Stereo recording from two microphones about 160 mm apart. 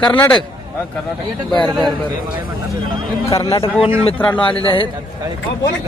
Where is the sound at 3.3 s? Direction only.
20° left (ahead or behind).